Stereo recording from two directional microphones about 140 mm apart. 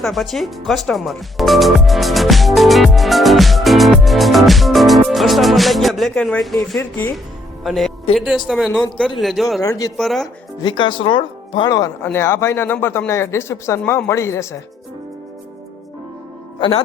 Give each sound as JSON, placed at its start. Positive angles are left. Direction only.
{"t": 0.0, "sound": "speech", "side_deg": 0}
{"t": 7.6, "sound": "music", "side_deg": 0}
{"t": 8.1, "sound": "speech", "side_deg": -5}
{"t": 9.6, "sound": "speech", "side_deg": 25}
{"t": 10.0, "sound": "speech", "side_deg": 0}
{"t": 10.6, "sound": "speech", "side_deg": 35}
{"t": 12.0, "sound": "speech", "side_deg": 20}
{"t": 16.6, "sound": "a man's voice", "side_deg": 35}